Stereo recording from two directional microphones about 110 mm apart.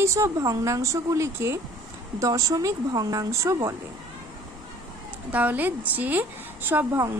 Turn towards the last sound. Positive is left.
turn(degrees=-20)  # may be behind; listen again after turning